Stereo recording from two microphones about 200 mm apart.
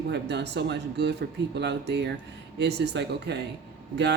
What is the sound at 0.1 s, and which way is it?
Speech, 60° right (ahead or behind).